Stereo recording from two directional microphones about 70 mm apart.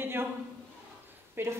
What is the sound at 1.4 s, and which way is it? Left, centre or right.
Speech, right.